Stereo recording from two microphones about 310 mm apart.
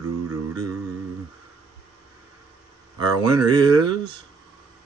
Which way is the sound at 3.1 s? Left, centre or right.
Centre.